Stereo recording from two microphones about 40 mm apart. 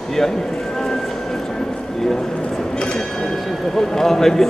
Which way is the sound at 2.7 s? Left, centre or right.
Centre.